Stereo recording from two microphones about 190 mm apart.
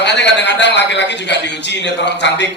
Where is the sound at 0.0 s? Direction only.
65° left (ahead or behind).